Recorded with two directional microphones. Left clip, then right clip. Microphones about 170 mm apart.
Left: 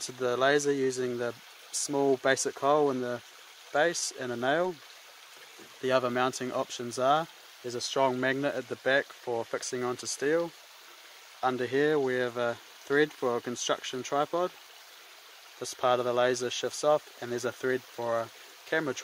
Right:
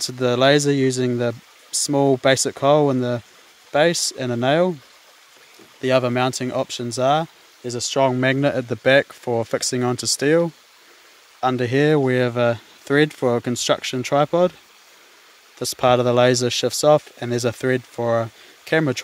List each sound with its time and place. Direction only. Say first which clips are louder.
0.0 s speech: right 10 dB; 45° right (ahead or behind)
5.8 s speech: right 8 dB; 45° right (ahead or behind)
15.6 s speech: right 10 dB; 45° right (ahead or behind)